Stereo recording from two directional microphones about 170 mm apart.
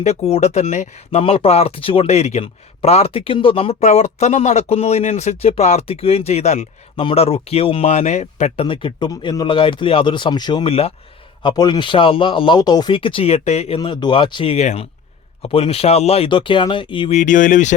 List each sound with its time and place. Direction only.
0.0 s speech: 40° left (ahead or behind)
11.4 s speech: 25° left (ahead or behind)
13.7 s speech: 25° left (ahead or behind)
17.2 s speech: 50° left (ahead or behind)